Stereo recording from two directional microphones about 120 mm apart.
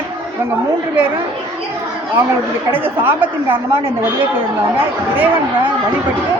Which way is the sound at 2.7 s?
15° right (ahead or behind).